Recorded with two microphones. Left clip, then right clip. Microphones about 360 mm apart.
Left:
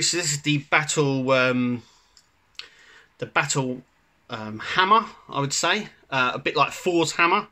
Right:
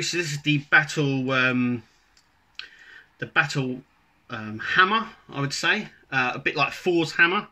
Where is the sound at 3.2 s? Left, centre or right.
Centre.